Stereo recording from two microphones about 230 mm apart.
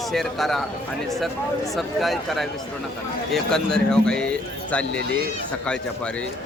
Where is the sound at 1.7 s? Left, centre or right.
Centre.